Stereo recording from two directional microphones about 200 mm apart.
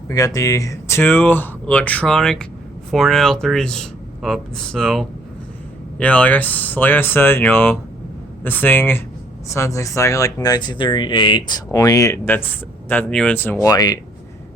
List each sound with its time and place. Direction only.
0.1 s speech: 15° left (ahead or behind)